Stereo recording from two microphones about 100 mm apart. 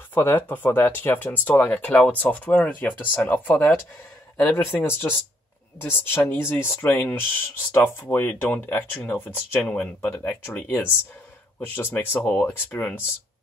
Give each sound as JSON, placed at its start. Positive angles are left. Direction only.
{"t": 0.1, "sound": "speech", "side_deg": 20}